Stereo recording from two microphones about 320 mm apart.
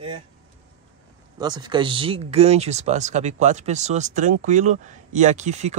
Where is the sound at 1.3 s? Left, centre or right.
Centre.